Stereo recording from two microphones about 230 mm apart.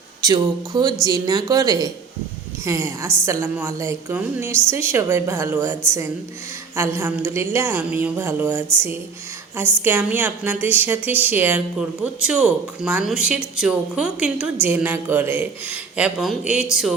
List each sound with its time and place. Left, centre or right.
0.2 s a woman's voice: centre